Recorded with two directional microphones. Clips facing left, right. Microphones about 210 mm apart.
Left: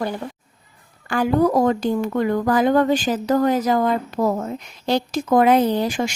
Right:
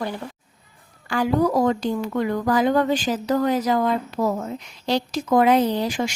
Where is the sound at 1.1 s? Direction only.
50° left (ahead or behind).